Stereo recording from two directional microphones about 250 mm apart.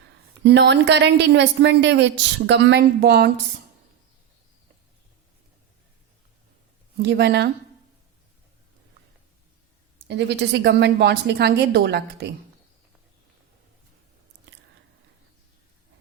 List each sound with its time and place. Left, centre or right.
0.4 s a woman's voice: right
6.9 s speech: right
10.1 s a woman's voice: right